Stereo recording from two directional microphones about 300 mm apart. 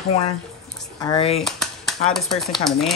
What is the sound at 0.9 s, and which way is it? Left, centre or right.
Speech, centre.